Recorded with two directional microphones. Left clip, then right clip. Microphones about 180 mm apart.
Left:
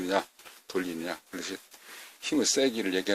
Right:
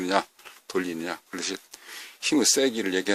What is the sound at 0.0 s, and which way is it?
Speech, 35° right (ahead or behind).